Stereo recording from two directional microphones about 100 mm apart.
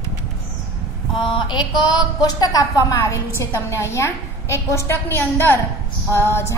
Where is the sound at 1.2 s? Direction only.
50° left (ahead or behind).